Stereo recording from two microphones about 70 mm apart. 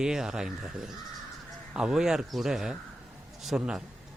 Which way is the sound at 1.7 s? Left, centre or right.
Centre.